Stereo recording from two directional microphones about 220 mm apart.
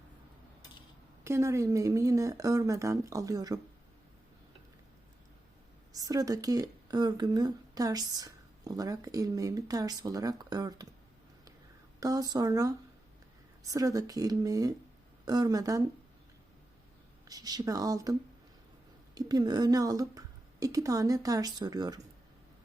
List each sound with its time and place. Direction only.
1.2 s speech: 10° right (ahead or behind)
5.9 s speech: 15° right (ahead or behind)
11.9 s speech: 15° right (ahead or behind)
17.2 s speech: 15° right (ahead or behind)